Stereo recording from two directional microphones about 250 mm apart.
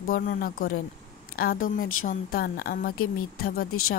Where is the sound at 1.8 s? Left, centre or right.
Left.